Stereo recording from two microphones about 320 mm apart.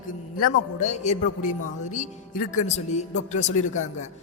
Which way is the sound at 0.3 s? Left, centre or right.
Left.